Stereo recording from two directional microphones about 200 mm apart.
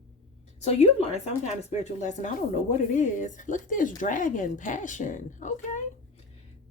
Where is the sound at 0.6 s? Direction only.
30° left (ahead or behind).